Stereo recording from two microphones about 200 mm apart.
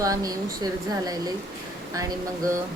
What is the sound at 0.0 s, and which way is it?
Speech, 15° right (ahead or behind).